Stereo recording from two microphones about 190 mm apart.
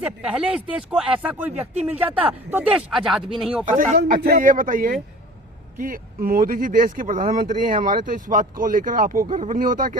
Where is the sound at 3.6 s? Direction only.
45° right (ahead or behind).